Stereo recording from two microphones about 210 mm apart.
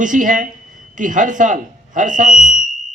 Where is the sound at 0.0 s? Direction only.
40° right (ahead or behind).